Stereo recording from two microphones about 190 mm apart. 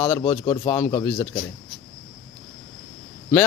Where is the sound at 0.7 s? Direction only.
10° left (ahead or behind).